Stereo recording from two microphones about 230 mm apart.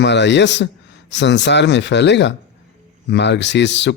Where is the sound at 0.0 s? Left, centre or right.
Left.